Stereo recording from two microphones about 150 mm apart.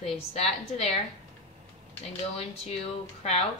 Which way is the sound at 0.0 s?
40° left (ahead or behind).